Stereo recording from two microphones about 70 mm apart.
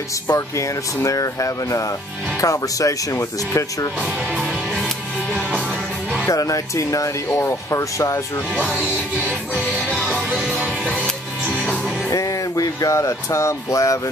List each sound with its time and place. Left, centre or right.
0.6 s speech: left
4.0 s speech: centre
4.6 s music: centre
6.2 s speech: left
10.0 s music: centre
10.3 s music: centre
10.6 s music: right
11.6 s music: centre
12.1 s speech: left